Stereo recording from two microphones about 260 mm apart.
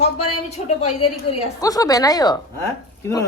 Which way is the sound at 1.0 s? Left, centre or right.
Centre.